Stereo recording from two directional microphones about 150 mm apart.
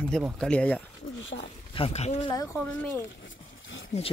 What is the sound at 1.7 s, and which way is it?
Speech, 40° left (ahead or behind).